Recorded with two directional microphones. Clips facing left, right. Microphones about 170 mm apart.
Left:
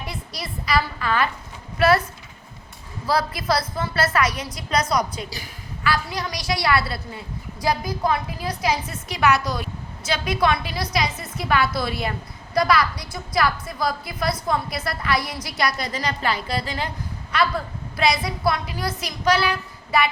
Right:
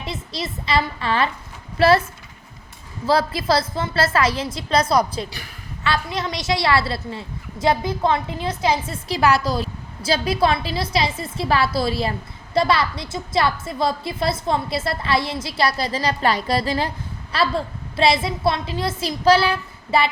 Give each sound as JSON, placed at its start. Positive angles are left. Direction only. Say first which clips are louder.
{"t": 0.0, "sound": "a woman's voice", "louder": "right 4 dB", "side_deg": -25}
{"t": 3.1, "sound": "a woman's voice", "louder": "right 3 dB", "side_deg": -25}